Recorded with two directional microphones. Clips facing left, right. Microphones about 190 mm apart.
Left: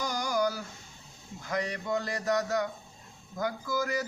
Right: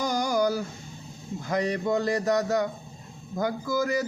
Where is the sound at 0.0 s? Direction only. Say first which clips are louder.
Right 5 dB; 30° right (ahead or behind).